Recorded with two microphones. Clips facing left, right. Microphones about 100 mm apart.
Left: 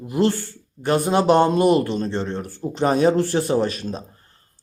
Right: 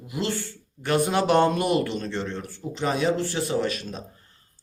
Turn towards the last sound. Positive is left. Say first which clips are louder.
# left 5 dB
turn(degrees=35)  # may be behind; listen again after turning